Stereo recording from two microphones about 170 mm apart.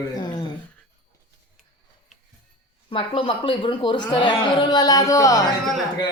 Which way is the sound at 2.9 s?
30° left (ahead or behind).